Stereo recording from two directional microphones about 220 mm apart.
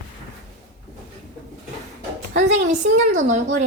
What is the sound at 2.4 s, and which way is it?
A woman's voice, 30° right (ahead or behind).